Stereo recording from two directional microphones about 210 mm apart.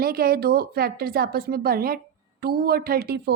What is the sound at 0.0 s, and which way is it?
A woman's voice, 45° right (ahead or behind).